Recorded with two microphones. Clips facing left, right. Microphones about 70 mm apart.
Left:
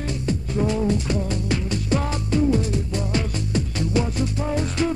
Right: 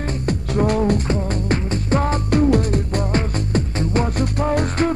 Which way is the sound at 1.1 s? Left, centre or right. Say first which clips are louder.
Right 3 dB; right.